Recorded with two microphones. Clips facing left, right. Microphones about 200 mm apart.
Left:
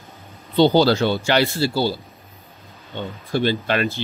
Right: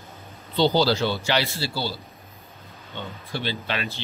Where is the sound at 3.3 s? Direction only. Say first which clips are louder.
Left 9 dB; 50° left (ahead or behind).